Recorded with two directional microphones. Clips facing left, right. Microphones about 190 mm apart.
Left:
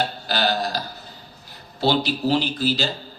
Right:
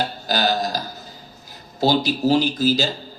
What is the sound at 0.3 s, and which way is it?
Burping, 45° right (ahead or behind).